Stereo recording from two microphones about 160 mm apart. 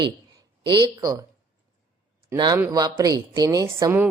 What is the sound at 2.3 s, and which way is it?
Speech, 25° right (ahead or behind).